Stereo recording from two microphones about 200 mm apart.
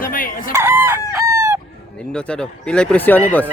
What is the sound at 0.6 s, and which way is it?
Chicken, 10° right (ahead or behind).